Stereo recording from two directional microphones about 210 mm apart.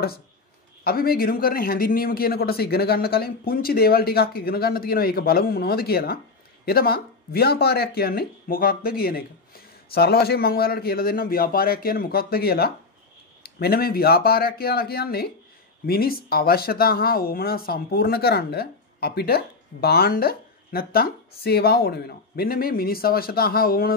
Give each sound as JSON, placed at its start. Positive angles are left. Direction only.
{"t": 0.8, "sound": "speech", "side_deg": 45}